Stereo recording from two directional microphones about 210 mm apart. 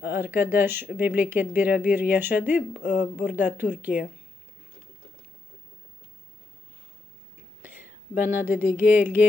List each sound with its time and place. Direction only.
0.1 s speech: 10° right (ahead or behind)
2.7 s speech: 40° left (ahead or behind)
3.3 s speech: 10° right (ahead or behind)
7.6 s a sound: 10° right (ahead or behind)
8.7 s speech: 10° right (ahead or behind)